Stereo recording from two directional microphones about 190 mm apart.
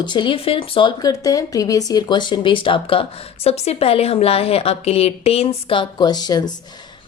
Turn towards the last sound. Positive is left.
turn(degrees=20)  # may be behind; listen again after turning